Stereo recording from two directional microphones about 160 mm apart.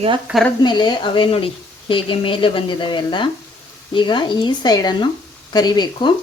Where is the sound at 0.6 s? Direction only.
30° left (ahead or behind).